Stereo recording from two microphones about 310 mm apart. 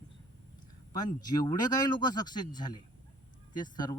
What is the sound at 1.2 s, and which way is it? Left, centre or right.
Speech, centre.